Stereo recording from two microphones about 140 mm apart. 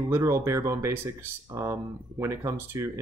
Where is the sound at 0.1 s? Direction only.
20° right (ahead or behind).